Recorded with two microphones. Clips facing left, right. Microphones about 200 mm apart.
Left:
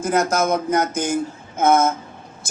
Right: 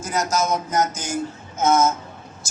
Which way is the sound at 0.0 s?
55° left (ahead or behind).